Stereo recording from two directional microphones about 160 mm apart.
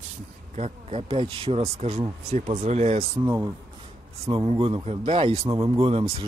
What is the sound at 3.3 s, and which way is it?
Speech, 25° right (ahead or behind).